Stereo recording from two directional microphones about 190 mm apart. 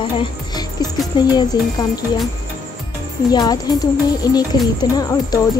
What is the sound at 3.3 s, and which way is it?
Speech, 20° left (ahead or behind).